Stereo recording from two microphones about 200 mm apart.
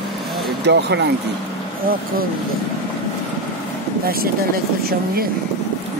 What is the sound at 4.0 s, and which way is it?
Speech, 50° right (ahead or behind).